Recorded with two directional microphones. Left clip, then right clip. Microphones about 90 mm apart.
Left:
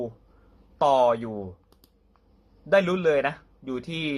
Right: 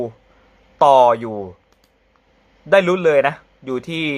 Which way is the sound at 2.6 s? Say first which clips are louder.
Right 7 dB; 25° right (ahead or behind).